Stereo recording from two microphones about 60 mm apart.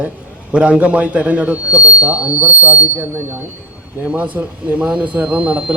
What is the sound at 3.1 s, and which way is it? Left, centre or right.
Speech, right.